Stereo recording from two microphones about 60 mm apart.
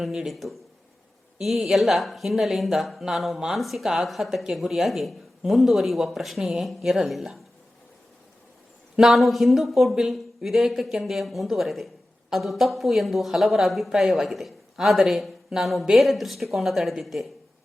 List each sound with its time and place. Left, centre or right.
0.0 s speech: centre
9.0 s speech: centre